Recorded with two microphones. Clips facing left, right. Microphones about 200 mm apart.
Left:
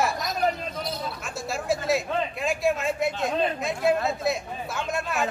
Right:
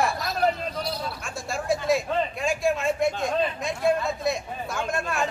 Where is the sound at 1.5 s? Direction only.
Centre (ahead or behind).